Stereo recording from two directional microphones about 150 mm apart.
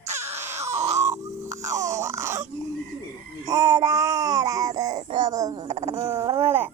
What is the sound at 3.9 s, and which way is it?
Babbling, 20° right (ahead or behind).